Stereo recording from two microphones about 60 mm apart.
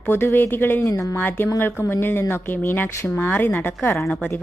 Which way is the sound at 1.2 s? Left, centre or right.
Left.